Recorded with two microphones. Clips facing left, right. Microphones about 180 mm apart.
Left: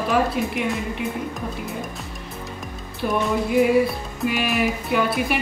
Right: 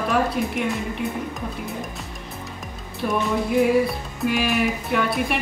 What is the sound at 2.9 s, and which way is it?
Music, centre (ahead or behind).